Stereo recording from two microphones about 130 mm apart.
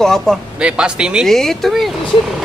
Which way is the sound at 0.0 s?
5° left (ahead or behind).